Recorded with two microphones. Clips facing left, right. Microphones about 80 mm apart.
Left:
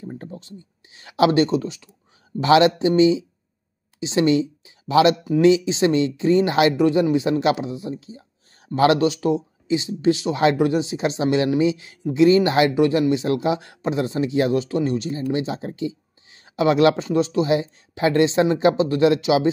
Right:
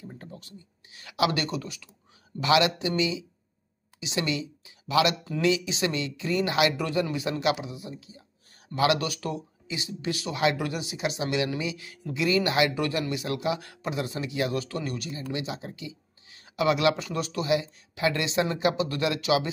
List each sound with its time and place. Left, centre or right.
0.0 s speech: left